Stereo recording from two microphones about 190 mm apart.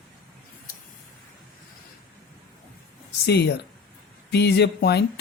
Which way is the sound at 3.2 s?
60° left (ahead or behind).